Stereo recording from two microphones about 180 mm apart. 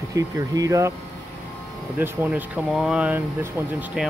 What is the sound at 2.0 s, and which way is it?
Speech, 5° right (ahead or behind).